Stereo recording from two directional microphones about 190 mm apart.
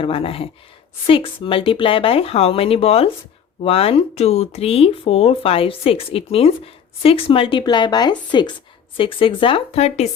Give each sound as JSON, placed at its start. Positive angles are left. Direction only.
{"t": 0.0, "sound": "speech", "side_deg": 30}